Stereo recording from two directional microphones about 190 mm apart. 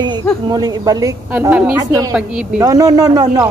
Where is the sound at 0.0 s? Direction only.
20° right (ahead or behind).